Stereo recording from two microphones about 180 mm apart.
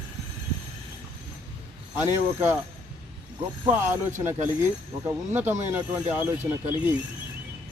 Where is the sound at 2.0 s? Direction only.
10° right (ahead or behind).